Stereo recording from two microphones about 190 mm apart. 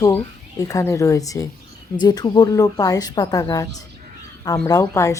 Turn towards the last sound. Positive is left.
turn(degrees=15)  # may be behind; listen again after turning